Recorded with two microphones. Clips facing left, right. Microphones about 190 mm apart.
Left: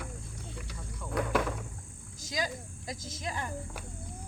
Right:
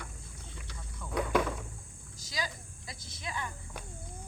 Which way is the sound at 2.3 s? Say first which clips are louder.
Left 4 dB; 45° left (ahead or behind).